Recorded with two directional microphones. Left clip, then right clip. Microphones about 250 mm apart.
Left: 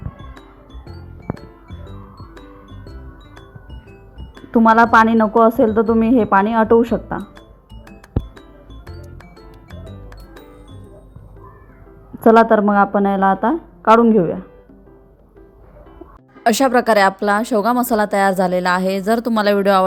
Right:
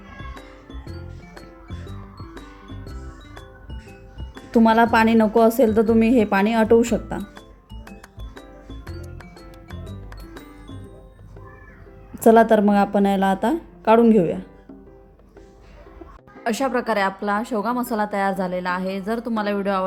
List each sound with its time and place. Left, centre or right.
0.2 s music: centre
4.4 s speech: centre
8.4 s music: centre
12.2 s speech: centre
16.4 s a woman's voice: left